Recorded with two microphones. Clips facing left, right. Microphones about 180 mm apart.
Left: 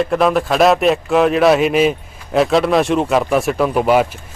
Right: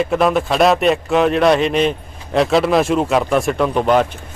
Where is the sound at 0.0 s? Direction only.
Centre (ahead or behind).